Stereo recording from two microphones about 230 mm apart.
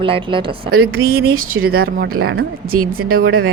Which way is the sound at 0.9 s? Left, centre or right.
Right.